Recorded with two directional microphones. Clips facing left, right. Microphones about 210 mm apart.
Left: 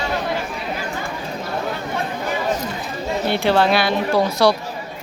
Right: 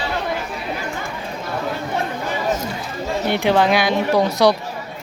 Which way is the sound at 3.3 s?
15° right (ahead or behind).